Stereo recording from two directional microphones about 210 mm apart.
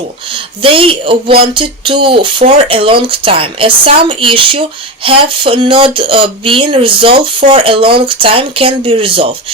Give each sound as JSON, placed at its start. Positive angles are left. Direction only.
{"t": 0.3, "sound": "speech", "side_deg": -25}